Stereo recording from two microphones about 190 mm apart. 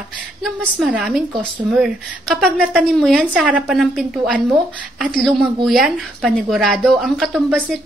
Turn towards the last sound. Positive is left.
turn(degrees=-5)  # may be behind; listen again after turning